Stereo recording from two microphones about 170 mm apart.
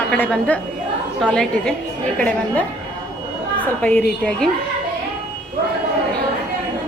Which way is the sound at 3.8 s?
5° left (ahead or behind).